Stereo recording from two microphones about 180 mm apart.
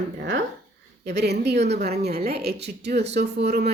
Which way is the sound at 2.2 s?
65° right (ahead or behind).